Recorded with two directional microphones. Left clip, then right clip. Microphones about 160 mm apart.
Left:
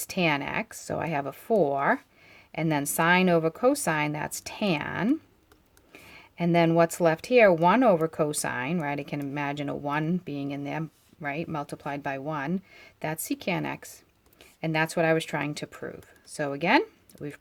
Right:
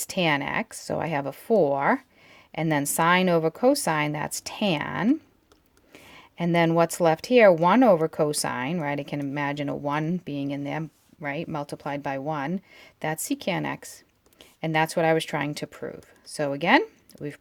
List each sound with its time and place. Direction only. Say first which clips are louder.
0.0 s speech: right 2 dB; 35° right (ahead or behind)